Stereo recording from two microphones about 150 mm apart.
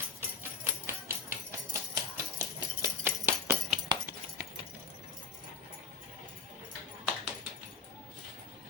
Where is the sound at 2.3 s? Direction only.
15° right (ahead or behind).